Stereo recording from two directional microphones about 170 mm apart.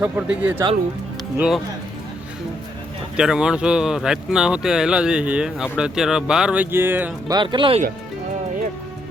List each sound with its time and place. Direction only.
0.0 s speech: 10° right (ahead or behind)
3.2 s speech: 5° right (ahead or behind)
7.3 s speech: 25° right (ahead or behind)